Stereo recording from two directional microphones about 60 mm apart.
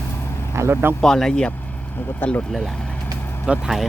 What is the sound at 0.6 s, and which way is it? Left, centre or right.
Vehicle, right.